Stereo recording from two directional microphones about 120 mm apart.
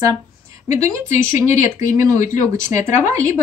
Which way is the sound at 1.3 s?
90° left.